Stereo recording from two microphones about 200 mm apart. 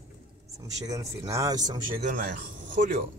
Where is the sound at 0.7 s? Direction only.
15° right (ahead or behind).